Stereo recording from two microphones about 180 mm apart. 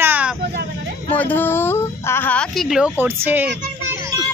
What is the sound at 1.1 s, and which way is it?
Speech, 10° left (ahead or behind).